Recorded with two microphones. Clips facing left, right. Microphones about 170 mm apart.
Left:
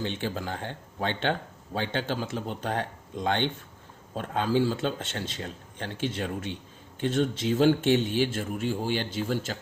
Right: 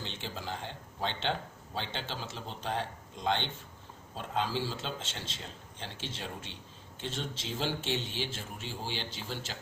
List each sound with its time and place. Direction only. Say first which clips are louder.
0.0 s speech: left 9 dB; 55° left (ahead or behind)